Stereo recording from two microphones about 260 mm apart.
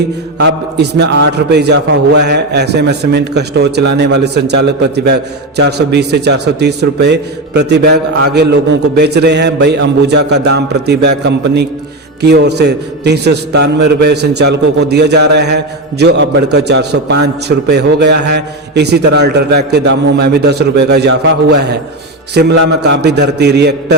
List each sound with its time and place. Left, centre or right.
0.3 s a man's voice: right